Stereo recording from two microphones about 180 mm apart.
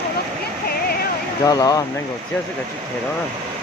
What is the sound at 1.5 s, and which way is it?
Speech, 20° left (ahead or behind).